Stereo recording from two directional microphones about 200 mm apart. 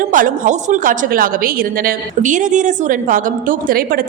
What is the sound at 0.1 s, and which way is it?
A woman's voice, 40° right (ahead or behind).